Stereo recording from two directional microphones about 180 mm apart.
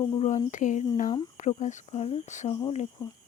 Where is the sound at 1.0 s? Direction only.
20° left (ahead or behind).